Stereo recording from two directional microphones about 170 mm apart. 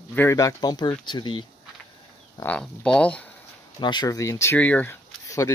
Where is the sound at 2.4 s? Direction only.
5° left (ahead or behind).